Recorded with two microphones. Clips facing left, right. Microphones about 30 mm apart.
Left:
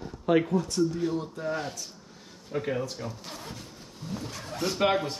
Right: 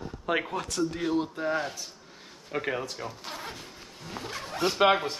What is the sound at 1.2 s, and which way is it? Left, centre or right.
Speech, right.